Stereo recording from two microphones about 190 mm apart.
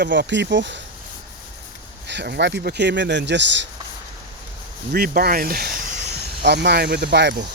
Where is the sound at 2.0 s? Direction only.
65° right (ahead or behind).